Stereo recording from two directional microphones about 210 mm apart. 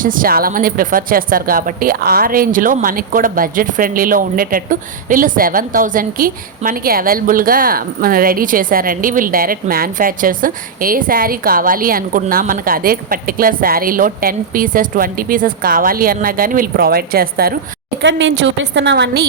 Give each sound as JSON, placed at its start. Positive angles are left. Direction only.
{"t": 0.0, "sound": "a woman's voice", "side_deg": -40}
{"t": 18.0, "sound": "a woman's voice", "side_deg": -60}